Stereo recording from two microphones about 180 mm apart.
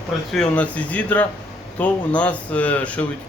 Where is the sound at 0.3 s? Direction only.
5° left (ahead or behind).